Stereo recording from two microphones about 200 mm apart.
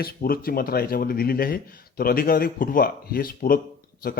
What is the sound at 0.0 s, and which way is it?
Speech, 50° left (ahead or behind).